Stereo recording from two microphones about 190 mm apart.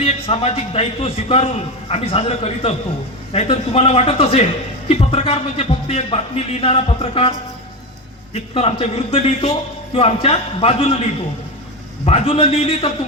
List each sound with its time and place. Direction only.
0.0 s speech: 30° left (ahead or behind)
12.0 s speech: 30° left (ahead or behind)